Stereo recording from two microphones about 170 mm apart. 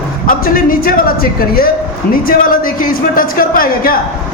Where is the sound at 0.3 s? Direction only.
55° left (ahead or behind).